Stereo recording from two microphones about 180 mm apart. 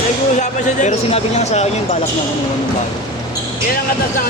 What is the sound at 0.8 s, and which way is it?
Speech, 40° left (ahead or behind).